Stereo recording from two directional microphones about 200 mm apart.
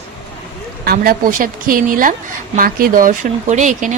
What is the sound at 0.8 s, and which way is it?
Speech, 45° right (ahead or behind).